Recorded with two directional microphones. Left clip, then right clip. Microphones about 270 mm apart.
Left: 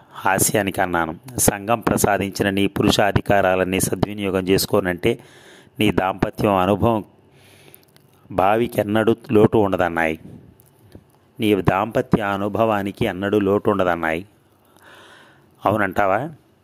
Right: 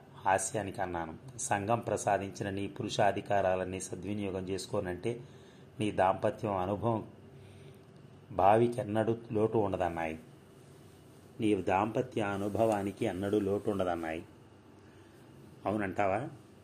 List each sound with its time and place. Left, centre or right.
0.2 s speech: left
8.4 s speech: left
11.3 s speech: left
15.6 s speech: left